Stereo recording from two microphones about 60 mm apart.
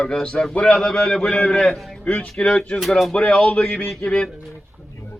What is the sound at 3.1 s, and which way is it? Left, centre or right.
Speech, centre.